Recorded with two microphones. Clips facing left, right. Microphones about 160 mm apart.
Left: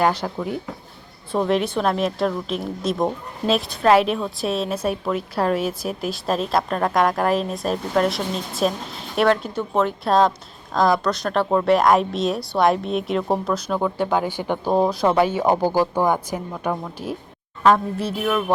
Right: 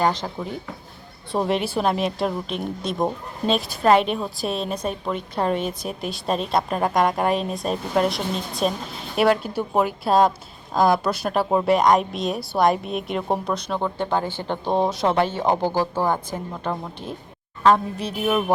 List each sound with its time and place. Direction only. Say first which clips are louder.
0.0 s speech: left 2 dB; 10° left (ahead or behind)
1.3 s a woman's voice: left 2 dB; centre (ahead or behind)
18.2 s music: right 1 dB; 20° right (ahead or behind)